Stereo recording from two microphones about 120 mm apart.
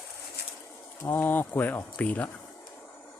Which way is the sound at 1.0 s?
20° left (ahead or behind).